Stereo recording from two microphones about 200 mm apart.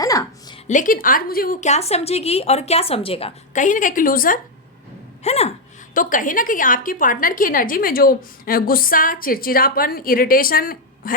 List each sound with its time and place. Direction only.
0.0 s music: 15° left (ahead or behind)
0.7 s a woman's voice: 40° left (ahead or behind)
5.2 s a woman's voice: 30° left (ahead or behind)